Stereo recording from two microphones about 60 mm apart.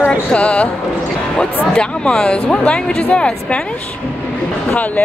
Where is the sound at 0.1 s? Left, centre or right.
Centre.